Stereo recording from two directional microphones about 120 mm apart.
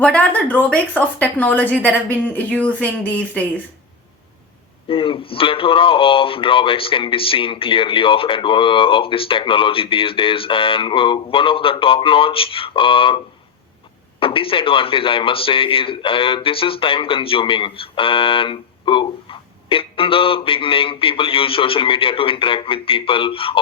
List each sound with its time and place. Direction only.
0.0 s speech: 10° left (ahead or behind)
4.9 s speech: 45° left (ahead or behind)